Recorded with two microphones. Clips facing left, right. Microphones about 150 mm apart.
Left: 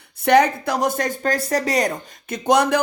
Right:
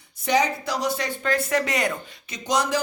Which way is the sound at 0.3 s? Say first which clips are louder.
Left 7 dB; 55° left (ahead or behind).